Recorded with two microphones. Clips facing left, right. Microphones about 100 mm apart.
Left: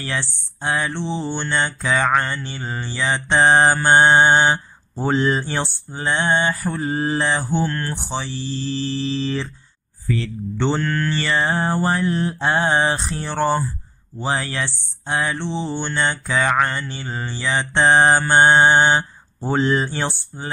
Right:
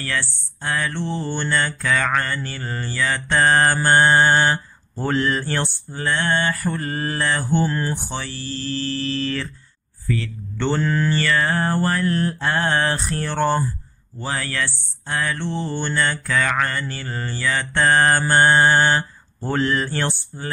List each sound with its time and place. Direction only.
0.0 s speech: 20° left (ahead or behind)
7.6 s speech: 10° right (ahead or behind)
8.1 s speech: 15° left (ahead or behind)
10.8 s mantra: 5° right (ahead or behind)
11.1 s speech: 20° left (ahead or behind)
18.3 s mantra: 20° left (ahead or behind)
19.7 s speech: 20° left (ahead or behind)